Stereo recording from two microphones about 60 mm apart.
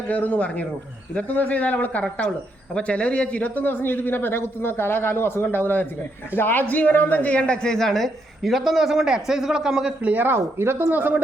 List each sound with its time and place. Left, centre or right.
0.1 s a man's voice: left; by 9.9 s centre
10.0 s speech: right
10.2 s speech: right
10.9 s speech: right